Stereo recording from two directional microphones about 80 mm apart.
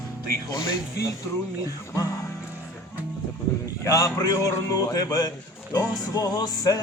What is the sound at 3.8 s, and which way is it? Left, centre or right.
Music, left.